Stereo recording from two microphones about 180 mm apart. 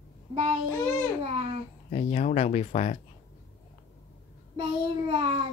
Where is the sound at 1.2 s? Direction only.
30° right (ahead or behind).